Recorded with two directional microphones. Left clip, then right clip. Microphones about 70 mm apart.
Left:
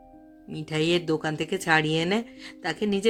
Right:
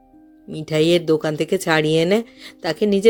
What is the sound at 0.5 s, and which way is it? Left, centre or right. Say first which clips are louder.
Speech: right 8 dB; right.